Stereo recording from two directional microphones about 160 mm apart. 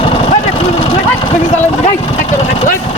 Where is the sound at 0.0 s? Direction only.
35° left (ahead or behind).